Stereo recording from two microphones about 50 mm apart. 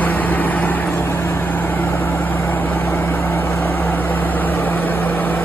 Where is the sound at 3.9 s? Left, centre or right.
Left.